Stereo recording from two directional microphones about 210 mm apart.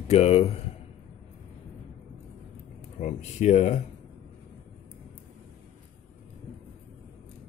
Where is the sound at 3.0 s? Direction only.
35° left (ahead or behind).